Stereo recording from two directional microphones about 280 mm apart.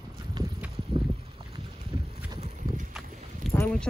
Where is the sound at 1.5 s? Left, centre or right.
Centre.